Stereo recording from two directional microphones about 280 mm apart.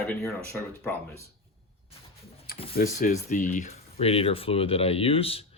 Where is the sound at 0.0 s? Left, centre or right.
Centre.